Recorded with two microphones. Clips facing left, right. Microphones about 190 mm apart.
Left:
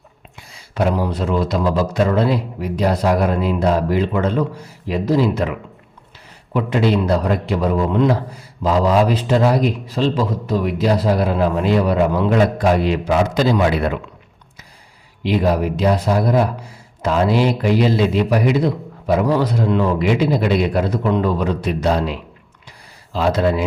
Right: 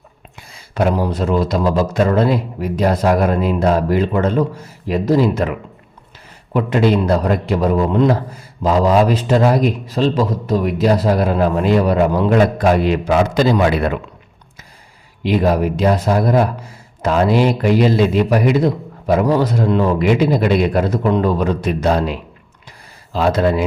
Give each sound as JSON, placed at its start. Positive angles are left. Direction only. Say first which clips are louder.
{"t": 0.3, "sound": "a man's voice", "louder": "right 2 dB", "side_deg": -50}
{"t": 15.2, "sound": "a man's voice", "louder": "right 2 dB", "side_deg": -50}